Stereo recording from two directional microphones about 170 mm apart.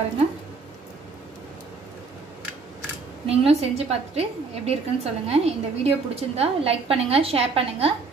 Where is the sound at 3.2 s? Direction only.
35° right (ahead or behind).